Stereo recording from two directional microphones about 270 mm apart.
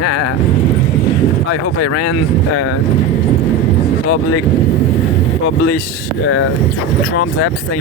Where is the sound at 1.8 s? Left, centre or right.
Left.